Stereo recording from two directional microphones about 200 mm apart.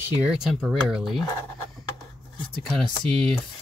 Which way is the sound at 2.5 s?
5° left (ahead or behind).